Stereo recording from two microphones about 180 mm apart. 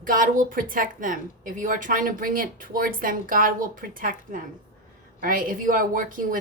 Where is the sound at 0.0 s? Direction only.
50° right (ahead or behind).